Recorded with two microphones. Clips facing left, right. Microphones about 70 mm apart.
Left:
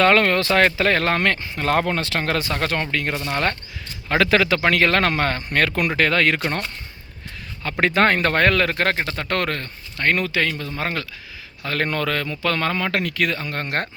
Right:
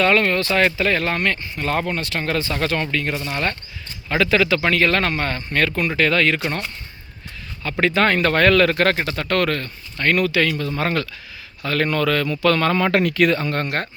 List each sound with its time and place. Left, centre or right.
0.0 s speech: left
0.5 s speech: left
2.5 s speech: left
5.1 s speech: left
6.0 s speech: left
7.6 s speech: left
8.8 s speech: centre
9.0 s speech: left
10.8 s speech: centre
11.6 s speech: left
12.7 s speech: centre
13.7 s speech: left